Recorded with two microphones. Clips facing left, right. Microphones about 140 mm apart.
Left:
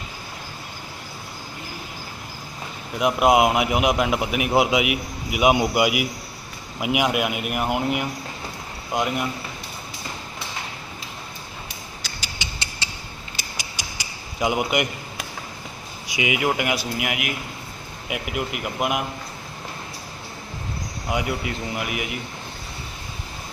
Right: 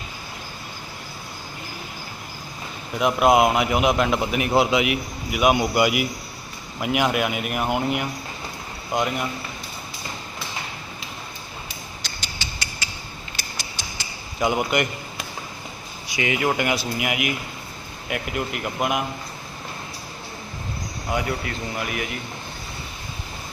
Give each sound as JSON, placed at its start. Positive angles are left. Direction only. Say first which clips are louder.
{"t": 3.0, "sound": "a man's voice", "louder": "even", "side_deg": 15}
{"t": 12.0, "sound": "rodents", "louder": "even", "side_deg": 5}
{"t": 12.4, "sound": "rodents", "louder": "left 1 dB", "side_deg": 20}
{"t": 12.8, "sound": "creak", "louder": "left 2 dB", "side_deg": 30}
{"t": 13.8, "sound": "a sound", "louder": "even", "side_deg": 15}
{"t": 14.3, "sound": "a man's voice", "louder": "even", "side_deg": 10}
{"t": 21.1, "sound": "a man's voice", "louder": "even", "side_deg": 15}